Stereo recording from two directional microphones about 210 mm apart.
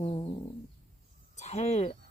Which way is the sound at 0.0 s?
25° left (ahead or behind).